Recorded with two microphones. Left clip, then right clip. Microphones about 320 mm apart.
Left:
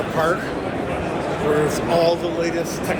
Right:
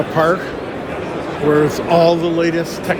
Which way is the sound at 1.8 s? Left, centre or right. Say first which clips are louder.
Right 6 dB; right.